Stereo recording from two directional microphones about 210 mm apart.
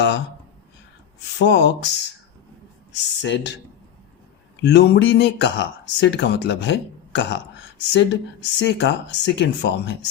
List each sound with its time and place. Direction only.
1.4 s speech: 55° left (ahead or behind)
2.9 s speech: 60° left (ahead or behind)
4.6 s speech: 55° left (ahead or behind)